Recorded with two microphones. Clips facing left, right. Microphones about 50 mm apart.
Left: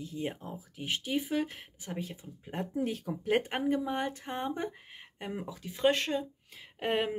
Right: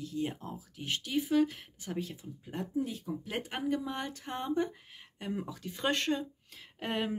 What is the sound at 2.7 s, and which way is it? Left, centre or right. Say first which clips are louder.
Speech: left 1 dB; left.